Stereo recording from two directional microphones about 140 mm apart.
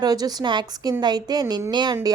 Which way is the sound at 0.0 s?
30° right (ahead or behind).